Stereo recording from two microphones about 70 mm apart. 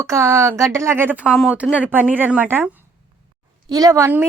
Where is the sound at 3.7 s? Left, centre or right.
Right.